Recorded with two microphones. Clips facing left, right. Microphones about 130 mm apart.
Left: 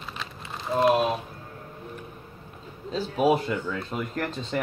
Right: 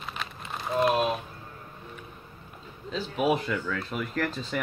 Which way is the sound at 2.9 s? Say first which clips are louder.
Left 3 dB; 35° left (ahead or behind).